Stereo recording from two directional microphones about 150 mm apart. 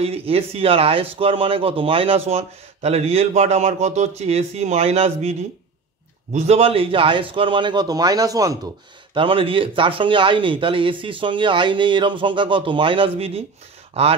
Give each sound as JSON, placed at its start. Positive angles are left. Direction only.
{"t": 0.0, "sound": "speech", "side_deg": -40}
{"t": 6.3, "sound": "speech", "side_deg": -45}
{"t": 9.1, "sound": "speech", "side_deg": -35}